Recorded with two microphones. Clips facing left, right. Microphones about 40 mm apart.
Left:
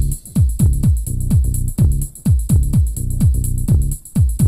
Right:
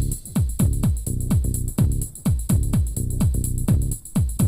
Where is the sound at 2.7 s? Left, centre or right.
Right.